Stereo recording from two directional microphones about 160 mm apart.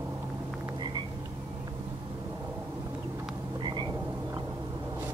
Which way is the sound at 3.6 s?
30° right (ahead or behind).